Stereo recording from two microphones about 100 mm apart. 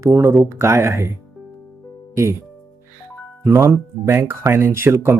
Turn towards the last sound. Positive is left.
turn(degrees=-25)  # may be behind; listen again after turning